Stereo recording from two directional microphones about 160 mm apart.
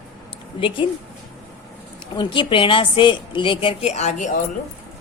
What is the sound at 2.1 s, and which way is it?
Speech, 30° left (ahead or behind).